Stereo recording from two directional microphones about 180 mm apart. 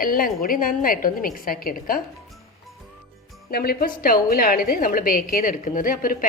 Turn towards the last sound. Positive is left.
turn(degrees=50)  # may be behind; listen again after turning